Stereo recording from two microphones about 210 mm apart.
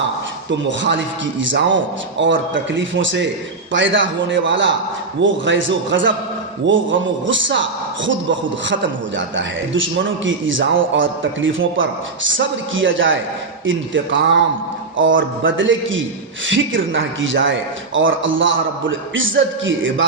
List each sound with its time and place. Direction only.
0.8 s a man's voice: 60° right (ahead or behind)